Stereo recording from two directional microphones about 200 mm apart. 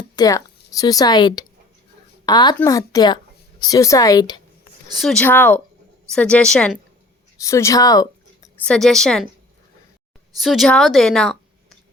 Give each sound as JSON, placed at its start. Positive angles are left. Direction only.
{"t": 0.2, "sound": "a woman's voice", "side_deg": 20}
{"t": 4.9, "sound": "a woman's voice", "side_deg": 0}
{"t": 10.3, "sound": "speech", "side_deg": 0}